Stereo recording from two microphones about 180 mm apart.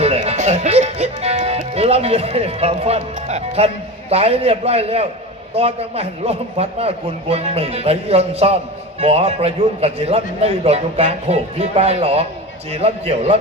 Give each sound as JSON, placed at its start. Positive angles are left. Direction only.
{"t": 0.0, "sound": "music", "side_deg": -35}
{"t": 4.1, "sound": "a man's voice", "side_deg": -35}